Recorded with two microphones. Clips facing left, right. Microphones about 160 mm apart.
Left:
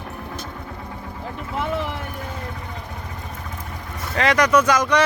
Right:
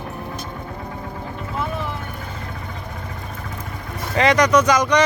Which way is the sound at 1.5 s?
90° left.